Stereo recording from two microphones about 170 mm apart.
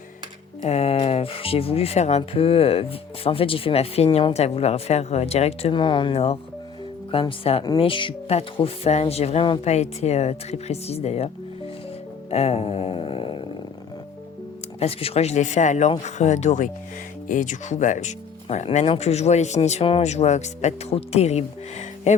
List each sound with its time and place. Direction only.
0.6 s speech: 40° left (ahead or behind)
12.3 s speech: 40° left (ahead or behind)
14.8 s speech: 35° left (ahead or behind)